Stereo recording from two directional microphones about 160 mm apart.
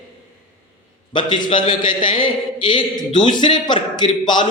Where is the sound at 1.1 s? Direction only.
30° left (ahead or behind).